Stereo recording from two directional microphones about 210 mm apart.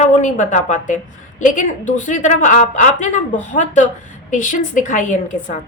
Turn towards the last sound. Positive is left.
turn(degrees=35)  # may be behind; listen again after turning